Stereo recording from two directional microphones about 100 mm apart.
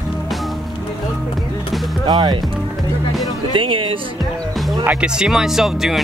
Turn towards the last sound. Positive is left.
turn(degrees=-5)  # may be behind; listen again after turning